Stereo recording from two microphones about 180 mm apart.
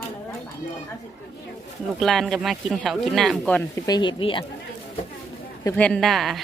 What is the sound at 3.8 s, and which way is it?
Speech, 25° left (ahead or behind).